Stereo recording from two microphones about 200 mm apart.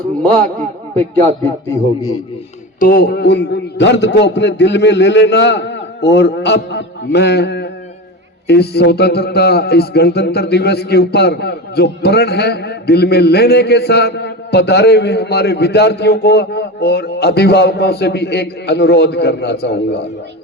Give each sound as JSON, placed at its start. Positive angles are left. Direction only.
{"t": 0.2, "sound": "a man's voice", "side_deg": 5}
{"t": 2.8, "sound": "a man's voice", "side_deg": 45}